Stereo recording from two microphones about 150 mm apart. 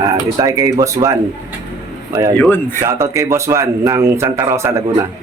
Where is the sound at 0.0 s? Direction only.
20° right (ahead or behind).